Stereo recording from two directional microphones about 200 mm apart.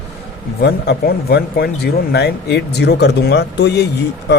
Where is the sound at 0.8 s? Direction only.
55° left (ahead or behind).